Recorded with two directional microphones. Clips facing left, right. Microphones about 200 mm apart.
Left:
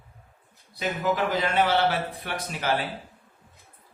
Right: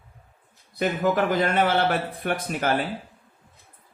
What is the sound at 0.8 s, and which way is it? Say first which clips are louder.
Speech: right 4 dB; 50° right (ahead or behind).